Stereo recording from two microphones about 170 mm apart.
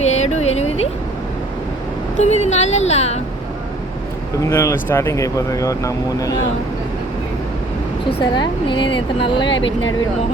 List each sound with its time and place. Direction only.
0.0 s a sound: 40° left (ahead or behind)
2.1 s speech: 40° left (ahead or behind)
4.4 s speech: 15° left (ahead or behind)
8.2 s speech: 25° left (ahead or behind)